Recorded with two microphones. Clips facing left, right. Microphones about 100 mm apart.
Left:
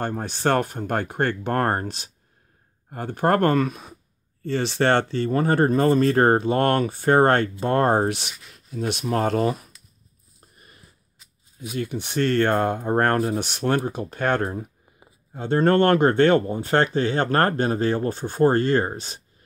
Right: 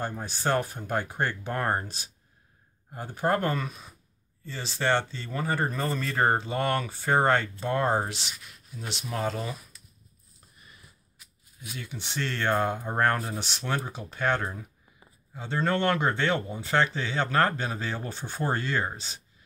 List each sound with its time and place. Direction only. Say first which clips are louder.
0.0 s speech: left 6 dB; 60° left (ahead or behind)
11.7 s speech: left 10 dB; 55° left (ahead or behind)